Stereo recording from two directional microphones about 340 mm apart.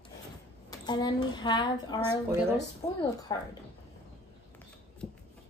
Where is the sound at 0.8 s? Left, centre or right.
Centre.